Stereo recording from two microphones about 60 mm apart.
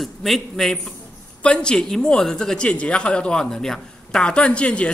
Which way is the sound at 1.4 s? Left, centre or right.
Centre.